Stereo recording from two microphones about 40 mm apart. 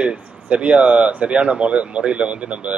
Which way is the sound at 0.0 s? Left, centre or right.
Right.